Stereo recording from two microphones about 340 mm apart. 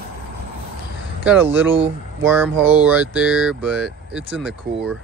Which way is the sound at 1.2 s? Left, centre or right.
Centre.